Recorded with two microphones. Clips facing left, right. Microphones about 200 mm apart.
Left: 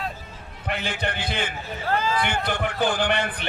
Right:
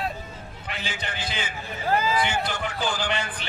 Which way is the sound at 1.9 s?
10° right (ahead or behind).